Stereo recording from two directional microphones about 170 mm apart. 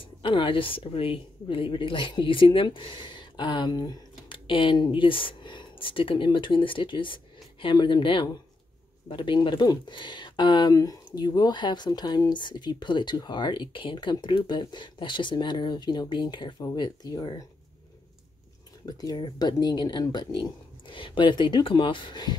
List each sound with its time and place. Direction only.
0.0 s speech: 30° left (ahead or behind)
18.9 s speech: 25° left (ahead or behind)